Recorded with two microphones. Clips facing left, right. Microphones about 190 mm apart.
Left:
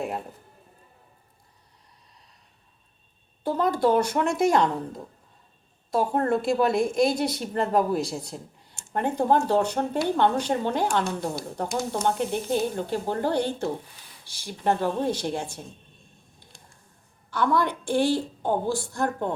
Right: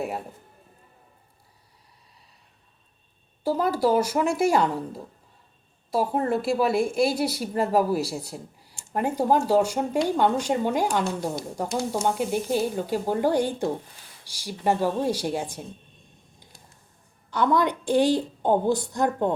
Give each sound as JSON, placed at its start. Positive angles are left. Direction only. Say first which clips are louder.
{"t": 3.4, "sound": "speech", "louder": "even", "side_deg": -5}
{"t": 17.3, "sound": "speech", "louder": "right 2 dB", "side_deg": -20}